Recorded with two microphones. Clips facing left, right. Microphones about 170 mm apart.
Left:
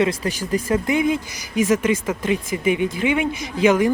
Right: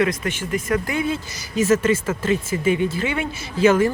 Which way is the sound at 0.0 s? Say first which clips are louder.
Left 1 dB; 30° left (ahead or behind).